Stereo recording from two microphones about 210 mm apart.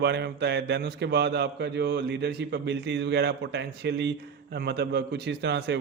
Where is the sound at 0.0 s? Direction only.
55° right (ahead or behind).